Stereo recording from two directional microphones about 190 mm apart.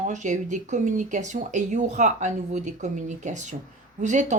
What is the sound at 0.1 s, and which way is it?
Speech, 40° right (ahead or behind).